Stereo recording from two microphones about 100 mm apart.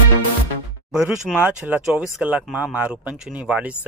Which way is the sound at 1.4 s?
15° right (ahead or behind).